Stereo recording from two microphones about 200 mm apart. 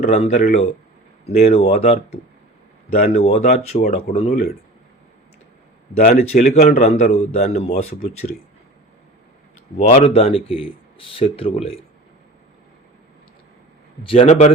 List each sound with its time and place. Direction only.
0.1 s a man's voice: 35° left (ahead or behind)
6.0 s a man's voice: 40° left (ahead or behind)
9.7 s speech: 35° left (ahead or behind)
14.0 s speech: 30° left (ahead or behind)